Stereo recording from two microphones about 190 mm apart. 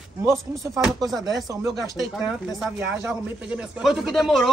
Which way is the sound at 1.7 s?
Centre (ahead or behind).